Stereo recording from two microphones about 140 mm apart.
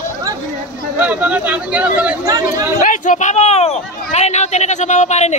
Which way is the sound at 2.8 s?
70° left (ahead or behind).